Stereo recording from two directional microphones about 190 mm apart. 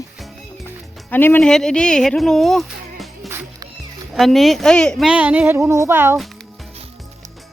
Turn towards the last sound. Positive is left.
turn(degrees=0)  # may be behind; listen again after turning